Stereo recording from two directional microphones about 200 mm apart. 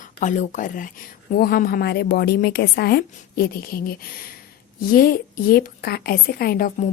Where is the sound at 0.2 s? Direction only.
40° left (ahead or behind).